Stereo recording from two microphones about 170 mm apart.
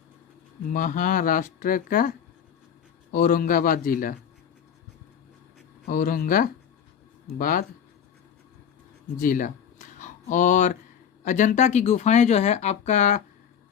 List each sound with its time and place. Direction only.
0.7 s speech: 50° left (ahead or behind)
5.8 s speech: 55° left (ahead or behind)
9.1 s a sound: 55° left (ahead or behind)
11.2 s speech: 45° left (ahead or behind)